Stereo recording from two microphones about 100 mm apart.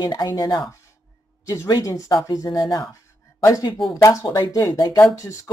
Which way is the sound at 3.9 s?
35° left (ahead or behind).